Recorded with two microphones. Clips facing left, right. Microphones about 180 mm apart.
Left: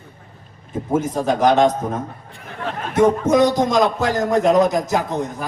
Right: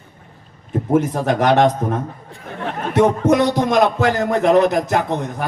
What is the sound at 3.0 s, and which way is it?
A man's voice, 60° right (ahead or behind).